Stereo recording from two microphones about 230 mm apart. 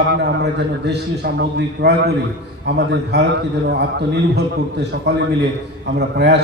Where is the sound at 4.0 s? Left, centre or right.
Right.